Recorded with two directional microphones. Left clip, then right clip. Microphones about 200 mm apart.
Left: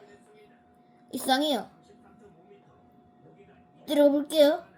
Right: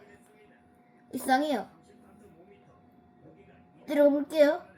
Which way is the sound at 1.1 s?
25° left (ahead or behind).